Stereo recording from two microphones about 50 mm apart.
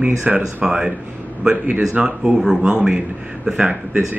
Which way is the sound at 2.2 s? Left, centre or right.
Centre.